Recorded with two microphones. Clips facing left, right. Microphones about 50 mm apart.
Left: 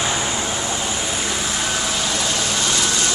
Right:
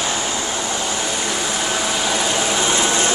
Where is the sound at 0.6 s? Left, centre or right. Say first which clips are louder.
Right 1 dB; centre.